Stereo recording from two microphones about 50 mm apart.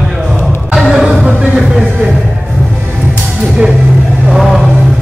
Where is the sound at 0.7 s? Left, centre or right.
Centre.